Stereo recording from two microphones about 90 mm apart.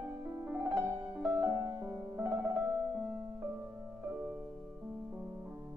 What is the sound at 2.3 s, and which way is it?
Piano, 15° right (ahead or behind).